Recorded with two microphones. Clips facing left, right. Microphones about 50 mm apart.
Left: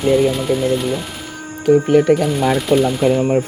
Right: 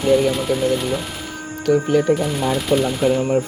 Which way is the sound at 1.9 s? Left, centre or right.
Left.